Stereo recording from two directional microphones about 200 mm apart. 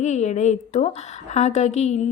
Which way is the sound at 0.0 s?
35° left (ahead or behind).